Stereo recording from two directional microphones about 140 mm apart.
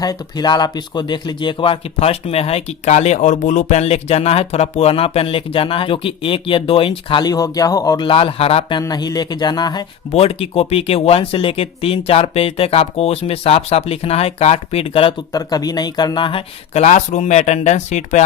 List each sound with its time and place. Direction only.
0.0 s speech: 30° left (ahead or behind)
8.8 s speech: 30° left (ahead or behind)
10.1 s speech: 45° left (ahead or behind)
15.3 s speech: 25° left (ahead or behind); by 18.2 s 55° left (ahead or behind)